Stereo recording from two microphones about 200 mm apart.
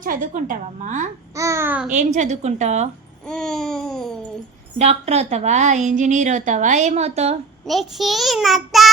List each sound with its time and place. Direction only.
0.0 s a woman's voice: 40° right (ahead or behind)
1.4 s a child's voice: 15° right (ahead or behind)
1.9 s a woman's voice: 35° right (ahead or behind)
3.2 s a child's voice: 5° left (ahead or behind)
4.8 s a woman's voice: 35° right (ahead or behind)
7.6 s a child's voice: centre (ahead or behind)